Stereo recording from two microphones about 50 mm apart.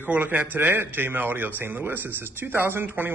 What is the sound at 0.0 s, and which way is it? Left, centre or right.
Speech, right.